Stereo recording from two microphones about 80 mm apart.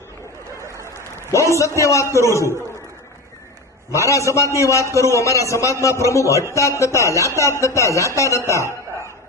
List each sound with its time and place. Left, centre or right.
1.5 s a man's voice: left
3.9 s a man's voice: left